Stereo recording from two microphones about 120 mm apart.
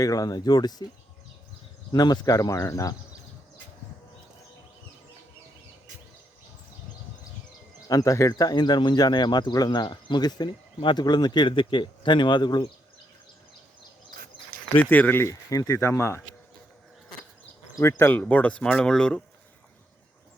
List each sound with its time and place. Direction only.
0.0 s speech: 30° left (ahead or behind)
1.9 s speech: 35° left (ahead or behind)
7.9 s speech: 30° left (ahead or behind)
14.8 s speech: 15° left (ahead or behind)
17.7 s speech: 25° left (ahead or behind); by 19.2 s 5° left (ahead or behind)